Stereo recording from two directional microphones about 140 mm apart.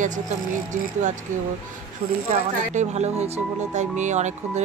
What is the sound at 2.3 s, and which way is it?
Speech, 55° right (ahead or behind).